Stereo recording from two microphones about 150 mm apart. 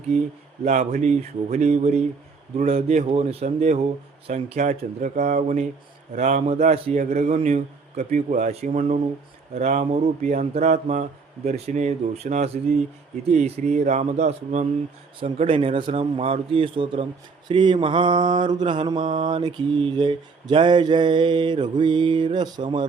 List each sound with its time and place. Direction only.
0.6 s speech: 45° right (ahead or behind)
15.2 s mantra: 35° right (ahead or behind)